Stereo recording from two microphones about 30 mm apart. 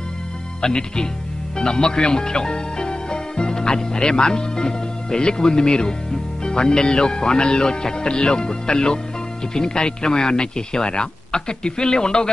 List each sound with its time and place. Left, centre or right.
0.6 s speech: left